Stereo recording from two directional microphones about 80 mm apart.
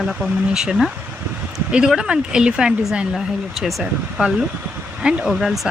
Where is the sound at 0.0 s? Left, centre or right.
Centre.